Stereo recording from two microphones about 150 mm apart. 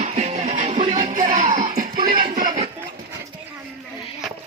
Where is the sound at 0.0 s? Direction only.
45° right (ahead or behind).